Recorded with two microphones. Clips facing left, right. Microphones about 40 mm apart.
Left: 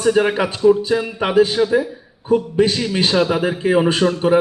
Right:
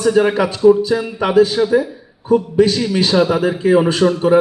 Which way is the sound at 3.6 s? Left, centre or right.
Left.